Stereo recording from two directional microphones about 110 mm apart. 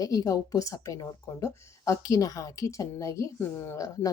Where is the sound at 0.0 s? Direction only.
35° left (ahead or behind).